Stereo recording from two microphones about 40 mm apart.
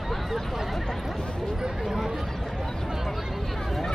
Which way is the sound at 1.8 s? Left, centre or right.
Centre.